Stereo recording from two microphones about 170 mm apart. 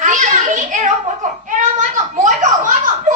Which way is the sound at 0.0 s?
45° right (ahead or behind).